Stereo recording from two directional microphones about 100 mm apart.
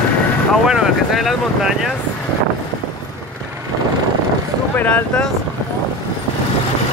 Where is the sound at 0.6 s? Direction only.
5° right (ahead or behind).